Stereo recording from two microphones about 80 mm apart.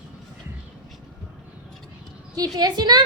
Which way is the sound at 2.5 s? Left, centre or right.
Right.